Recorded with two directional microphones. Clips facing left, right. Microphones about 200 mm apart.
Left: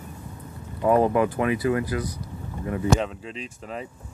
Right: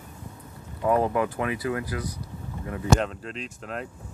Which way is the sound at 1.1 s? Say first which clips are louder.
Left 4 dB; 20° left (ahead or behind).